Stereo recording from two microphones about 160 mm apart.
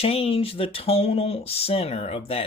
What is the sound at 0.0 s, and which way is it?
Speech, 40° left (ahead or behind).